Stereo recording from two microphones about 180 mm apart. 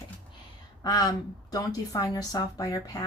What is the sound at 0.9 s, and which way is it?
A woman's voice, 20° left (ahead or behind).